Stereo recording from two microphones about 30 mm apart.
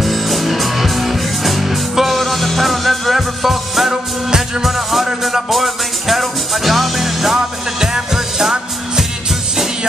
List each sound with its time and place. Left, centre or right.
0.0 s music: centre
7.3 s music: centre